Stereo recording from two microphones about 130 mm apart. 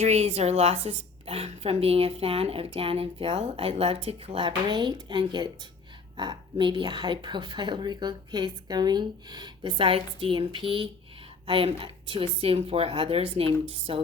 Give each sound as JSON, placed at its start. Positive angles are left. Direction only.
{"t": 0.0, "sound": "speech", "side_deg": -55}